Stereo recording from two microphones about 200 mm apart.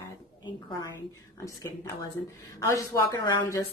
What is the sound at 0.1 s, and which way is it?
A woman's voice, 15° left (ahead or behind).